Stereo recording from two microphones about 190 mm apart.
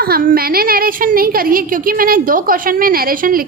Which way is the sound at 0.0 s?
50° right (ahead or behind).